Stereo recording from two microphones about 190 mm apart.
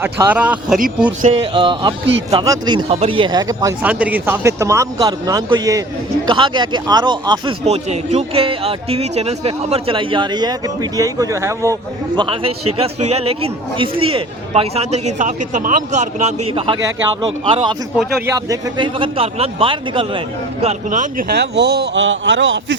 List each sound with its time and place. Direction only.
0.0 s a man's voice: 10° right (ahead or behind)
1.5 s a man's voice: 25° right (ahead or behind)
7.6 s a man's voice: 35° right (ahead or behind)
17.9 s speech: 5° right (ahead or behind)
18.3 s a man's voice: 20° right (ahead or behind); by 21.2 s 40° right (ahead or behind)
21.3 s a man's voice: 60° right (ahead or behind)